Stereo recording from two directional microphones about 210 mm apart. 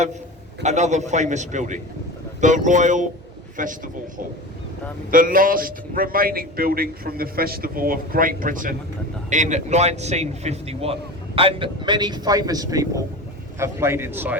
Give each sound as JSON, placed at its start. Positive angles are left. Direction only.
{"t": 0.6, "sound": "speech", "side_deg": -35}
{"t": 5.1, "sound": "a man's voice", "side_deg": -40}